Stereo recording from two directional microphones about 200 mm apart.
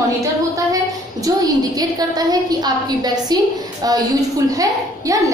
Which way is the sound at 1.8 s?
20° right (ahead or behind).